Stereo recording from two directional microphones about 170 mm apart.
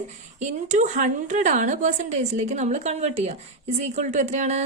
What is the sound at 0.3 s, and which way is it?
A woman's voice, 45° right (ahead or behind).